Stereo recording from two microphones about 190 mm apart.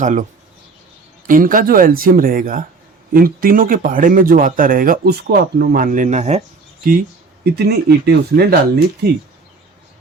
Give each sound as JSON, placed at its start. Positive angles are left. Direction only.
{"t": 0.0, "sound": "speech", "side_deg": -40}
{"t": 1.3, "sound": "speech", "side_deg": -45}
{"t": 7.5, "sound": "speech", "side_deg": -55}